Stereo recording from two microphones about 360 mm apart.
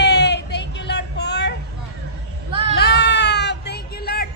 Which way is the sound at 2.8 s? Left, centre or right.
Left.